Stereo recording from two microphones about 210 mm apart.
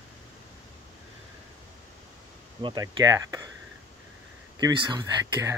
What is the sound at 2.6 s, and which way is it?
Speech, 20° right (ahead or behind).